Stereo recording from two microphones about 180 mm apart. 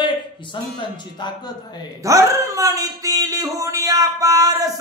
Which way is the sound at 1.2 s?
25° left (ahead or behind).